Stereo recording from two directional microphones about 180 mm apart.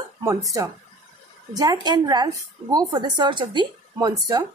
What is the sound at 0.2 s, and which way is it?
A woman's voice, 20° right (ahead or behind).